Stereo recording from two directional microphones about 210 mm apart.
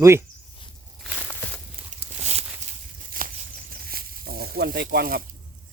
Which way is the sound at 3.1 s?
40° right (ahead or behind).